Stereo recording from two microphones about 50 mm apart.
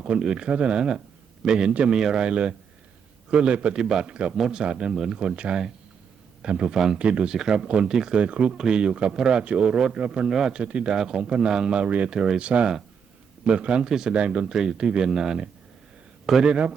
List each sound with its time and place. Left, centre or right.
0.0 s speech: centre
0.8 s a man's voice: centre
8.2 s speech: right
10.2 s speech: centre
10.6 s speech: right
12.1 s speech: centre
12.4 s speech: right
14.1 s a man's voice: right
16.5 s speech: right